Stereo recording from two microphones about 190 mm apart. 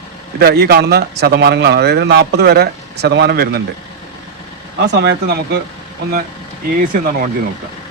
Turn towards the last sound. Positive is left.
turn(degrees=-45)  # may be behind; listen again after turning